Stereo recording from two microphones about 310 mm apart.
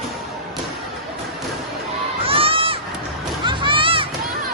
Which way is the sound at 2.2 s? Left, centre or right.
Centre.